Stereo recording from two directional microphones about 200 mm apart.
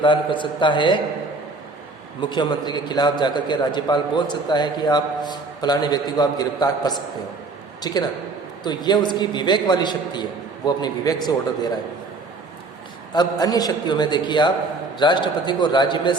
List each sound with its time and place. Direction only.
0.0 s a man's voice: 25° left (ahead or behind)
2.3 s a man's voice: 20° left (ahead or behind)
13.1 s a man's voice: 20° left (ahead or behind)